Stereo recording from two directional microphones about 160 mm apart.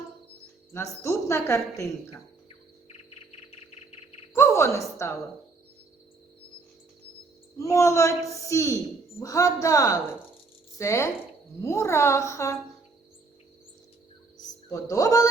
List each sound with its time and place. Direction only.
0.7 s a woman's voice: 15° left (ahead or behind)
4.4 s a woman's voice: 15° left (ahead or behind)
7.6 s a woman's voice: 20° left (ahead or behind)
14.7 s a woman's voice: 20° left (ahead or behind)